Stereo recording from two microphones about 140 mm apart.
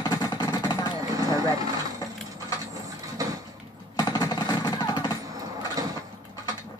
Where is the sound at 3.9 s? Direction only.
30° left (ahead or behind).